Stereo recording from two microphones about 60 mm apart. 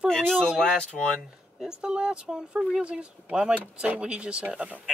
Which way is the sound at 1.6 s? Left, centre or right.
Centre.